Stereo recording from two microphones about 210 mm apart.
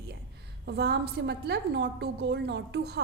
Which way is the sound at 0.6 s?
50° right (ahead or behind).